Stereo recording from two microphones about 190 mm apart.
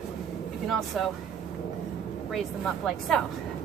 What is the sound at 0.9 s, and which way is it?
Speech, centre (ahead or behind).